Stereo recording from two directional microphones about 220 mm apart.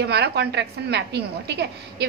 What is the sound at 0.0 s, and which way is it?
A woman's voice, 50° right (ahead or behind).